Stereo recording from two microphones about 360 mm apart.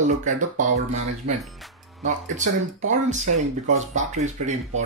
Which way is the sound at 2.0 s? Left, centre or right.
Centre.